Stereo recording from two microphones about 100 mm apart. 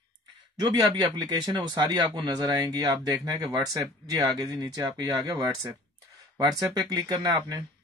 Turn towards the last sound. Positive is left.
turn(degrees=-45)  # may be behind; listen again after turning